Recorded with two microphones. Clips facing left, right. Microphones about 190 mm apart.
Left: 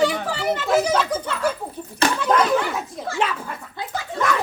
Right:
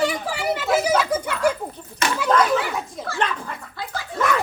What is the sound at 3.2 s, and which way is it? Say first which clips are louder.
Dog: left 1 dB; 5° left (ahead or behind).